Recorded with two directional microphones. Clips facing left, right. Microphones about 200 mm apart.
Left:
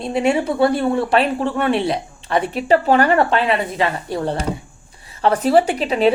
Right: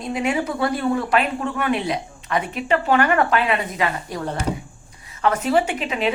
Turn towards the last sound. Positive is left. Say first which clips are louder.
# left 6 dB
turn(degrees=35)  # may be behind; listen again after turning